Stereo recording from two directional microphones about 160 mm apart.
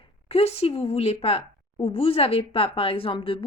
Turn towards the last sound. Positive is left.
turn(degrees=35)  # may be behind; listen again after turning